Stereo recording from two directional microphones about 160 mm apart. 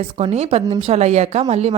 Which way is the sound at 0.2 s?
40° right (ahead or behind).